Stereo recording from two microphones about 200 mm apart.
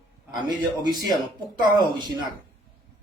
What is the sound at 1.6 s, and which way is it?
Speech, 20° right (ahead or behind).